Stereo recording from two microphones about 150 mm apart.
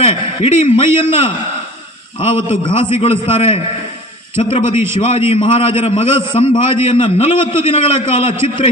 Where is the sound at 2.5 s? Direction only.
35° left (ahead or behind).